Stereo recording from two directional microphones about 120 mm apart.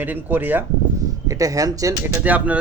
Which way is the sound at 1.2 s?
30° right (ahead or behind).